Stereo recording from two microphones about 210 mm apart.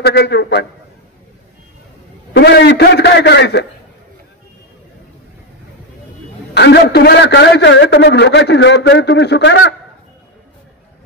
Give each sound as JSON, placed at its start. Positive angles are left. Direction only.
{"t": 0.0, "sound": "a man's voice", "side_deg": 50}
{"t": 2.3, "sound": "a man's voice", "side_deg": 55}
{"t": 6.5, "sound": "a man's voice", "side_deg": 50}